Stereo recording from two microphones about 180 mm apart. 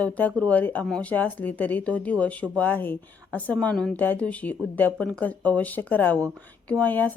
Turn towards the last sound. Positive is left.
turn(degrees=10)  # may be behind; listen again after turning